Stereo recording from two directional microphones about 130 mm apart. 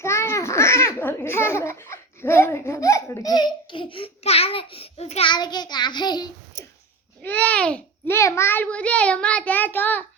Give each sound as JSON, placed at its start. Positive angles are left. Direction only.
{"t": 0.0, "sound": "a child's voice", "side_deg": 20}
{"t": 5.3, "sound": "child singing", "side_deg": 35}
{"t": 7.2, "sound": "a child's voice", "side_deg": 10}
{"t": 8.1, "sound": "a child's voice", "side_deg": 20}